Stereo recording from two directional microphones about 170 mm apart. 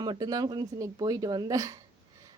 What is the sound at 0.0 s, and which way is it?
A woman's voice, 25° right (ahead or behind).